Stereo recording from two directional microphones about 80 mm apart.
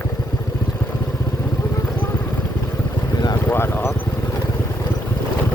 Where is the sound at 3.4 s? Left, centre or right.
Left.